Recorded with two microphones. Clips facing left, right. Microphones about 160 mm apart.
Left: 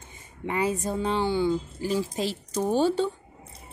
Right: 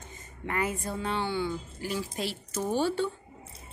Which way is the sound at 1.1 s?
35° left (ahead or behind).